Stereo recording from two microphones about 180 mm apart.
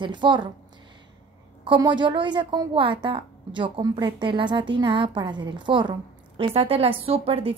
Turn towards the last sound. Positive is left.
turn(degrees=-35)  # may be behind; listen again after turning